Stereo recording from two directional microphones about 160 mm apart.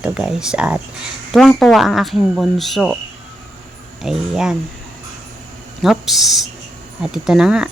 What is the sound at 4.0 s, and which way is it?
Speech, 5° right (ahead or behind).